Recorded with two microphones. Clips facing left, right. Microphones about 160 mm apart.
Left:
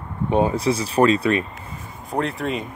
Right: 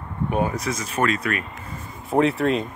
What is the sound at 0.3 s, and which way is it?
Speech, 25° left (ahead or behind).